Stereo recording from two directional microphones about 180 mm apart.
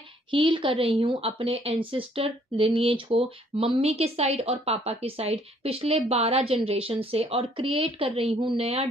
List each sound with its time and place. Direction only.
0.3 s a woman's voice: 25° right (ahead or behind)